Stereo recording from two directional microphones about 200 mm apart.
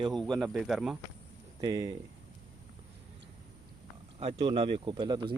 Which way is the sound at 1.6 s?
20° right (ahead or behind).